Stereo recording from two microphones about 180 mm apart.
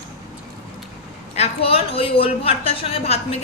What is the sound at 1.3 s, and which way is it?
A woman's voice, 35° left (ahead or behind).